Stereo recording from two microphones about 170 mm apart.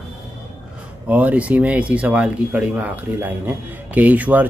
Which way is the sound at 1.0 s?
10° right (ahead or behind).